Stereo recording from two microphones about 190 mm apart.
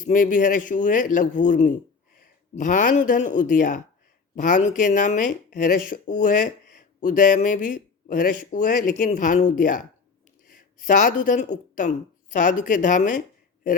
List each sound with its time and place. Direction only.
0.1 s speech: 45° left (ahead or behind)